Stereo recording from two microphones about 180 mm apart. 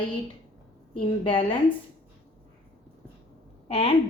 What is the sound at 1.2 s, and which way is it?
Speech, 30° left (ahead or behind).